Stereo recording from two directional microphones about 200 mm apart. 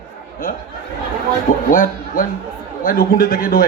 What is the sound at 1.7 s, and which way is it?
A man's voice, 45° left (ahead or behind).